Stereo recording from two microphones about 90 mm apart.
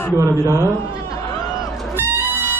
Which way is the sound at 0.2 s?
35° right (ahead or behind).